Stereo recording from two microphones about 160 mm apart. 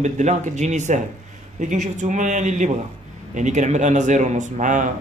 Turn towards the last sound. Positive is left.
turn(degrees=-50)  # may be behind; listen again after turning